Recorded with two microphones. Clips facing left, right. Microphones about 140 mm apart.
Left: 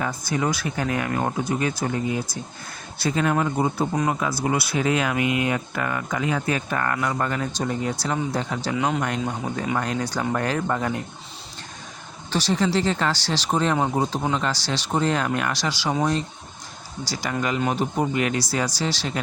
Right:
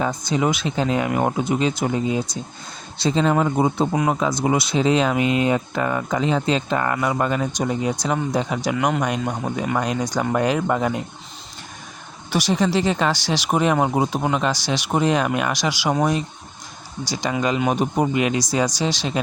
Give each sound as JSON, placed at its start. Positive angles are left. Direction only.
{"t": 0.0, "sound": "speech", "side_deg": -20}
{"t": 12.3, "sound": "speech", "side_deg": -15}
{"t": 17.1, "sound": "speech", "side_deg": -20}